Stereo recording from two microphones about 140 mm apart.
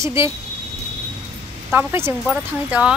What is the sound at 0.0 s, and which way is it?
Speech, 20° right (ahead or behind).